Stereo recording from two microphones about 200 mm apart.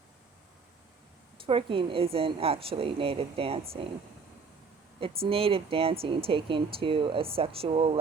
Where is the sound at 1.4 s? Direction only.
25° right (ahead or behind).